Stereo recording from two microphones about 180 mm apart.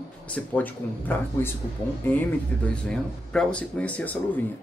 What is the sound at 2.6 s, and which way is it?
Speech, 5° left (ahead or behind).